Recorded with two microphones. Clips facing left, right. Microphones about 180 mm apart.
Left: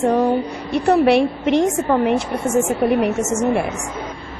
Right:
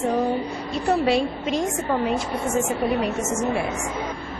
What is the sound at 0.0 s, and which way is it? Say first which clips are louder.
A woman's voice: left 6 dB; 75° left (ahead or behind).